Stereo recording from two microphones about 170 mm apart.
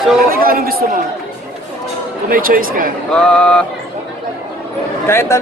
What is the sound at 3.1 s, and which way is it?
Speech, 5° left (ahead or behind).